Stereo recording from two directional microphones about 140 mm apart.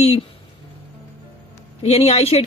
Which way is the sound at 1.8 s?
50° left (ahead or behind).